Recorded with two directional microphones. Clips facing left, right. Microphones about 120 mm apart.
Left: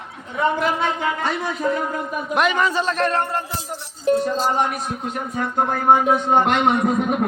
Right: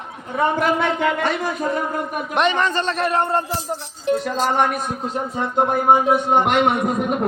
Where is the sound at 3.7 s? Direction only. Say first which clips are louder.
Right 5 dB; 35° right (ahead or behind).